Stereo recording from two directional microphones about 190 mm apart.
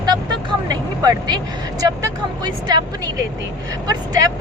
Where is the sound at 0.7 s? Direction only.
20° right (ahead or behind).